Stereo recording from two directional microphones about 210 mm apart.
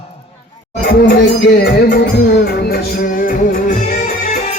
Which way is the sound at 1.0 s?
50° left (ahead or behind).